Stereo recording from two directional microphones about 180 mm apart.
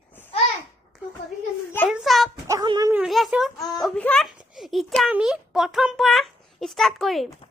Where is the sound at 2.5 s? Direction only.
20° right (ahead or behind).